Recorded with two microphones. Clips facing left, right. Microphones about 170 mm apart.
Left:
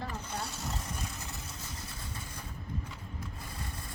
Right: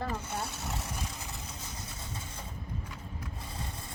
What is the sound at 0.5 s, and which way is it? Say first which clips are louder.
Vehicle: right 1 dB; 65° right (ahead or behind).